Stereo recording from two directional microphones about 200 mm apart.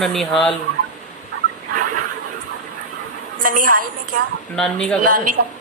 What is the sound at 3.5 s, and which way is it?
Speech, 45° right (ahead or behind).